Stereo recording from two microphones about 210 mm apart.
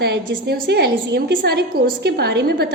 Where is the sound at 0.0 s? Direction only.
50° right (ahead or behind).